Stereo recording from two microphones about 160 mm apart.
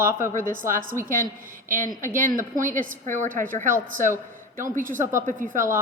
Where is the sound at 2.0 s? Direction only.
55° right (ahead or behind).